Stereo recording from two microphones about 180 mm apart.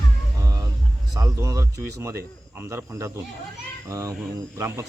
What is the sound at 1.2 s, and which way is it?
Speech, 15° right (ahead or behind).